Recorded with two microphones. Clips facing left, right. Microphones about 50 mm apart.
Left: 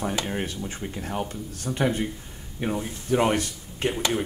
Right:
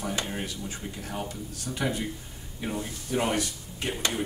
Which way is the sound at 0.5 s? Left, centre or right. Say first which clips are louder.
Left 4 dB; left.